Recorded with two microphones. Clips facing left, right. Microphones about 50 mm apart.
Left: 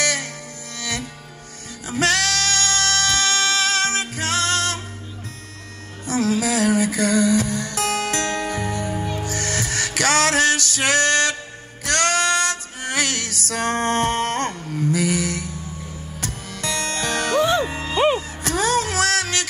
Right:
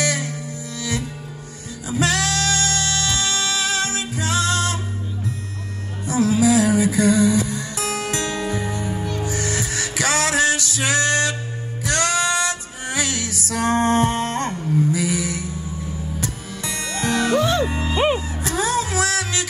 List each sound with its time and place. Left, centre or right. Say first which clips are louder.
0.0 s music: even; left
6.0 s music: right 4 dB; left
14.7 s a sound: right 2 dB; left
16.2 s music: right 2 dB; left
17.4 s music: left 1 dB; left
17.6 s music: right 3 dB; centre
17.9 s music: left 2 dB; centre
18.6 s music: left 1 dB; left